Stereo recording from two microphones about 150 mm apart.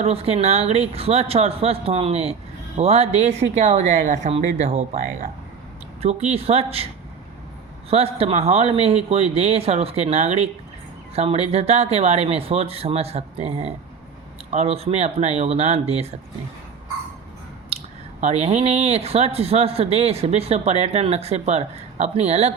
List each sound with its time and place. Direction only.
0.0 s speech: 40° right (ahead or behind)
7.9 s speech: 40° right (ahead or behind)
17.7 s squish: 40° right (ahead or behind)
18.2 s speech: 45° right (ahead or behind)